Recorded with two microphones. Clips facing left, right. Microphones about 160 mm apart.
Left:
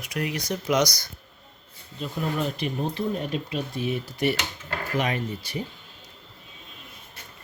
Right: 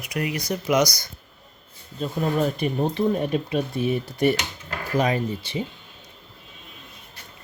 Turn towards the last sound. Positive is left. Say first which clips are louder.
# right 4 dB
turn(degrees=-30)  # may be behind; listen again after turning